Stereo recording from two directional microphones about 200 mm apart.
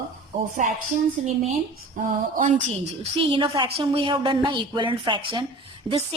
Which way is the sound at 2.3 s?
40° right (ahead or behind).